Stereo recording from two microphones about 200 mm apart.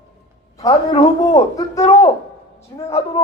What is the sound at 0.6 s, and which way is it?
A man's voice, 25° left (ahead or behind).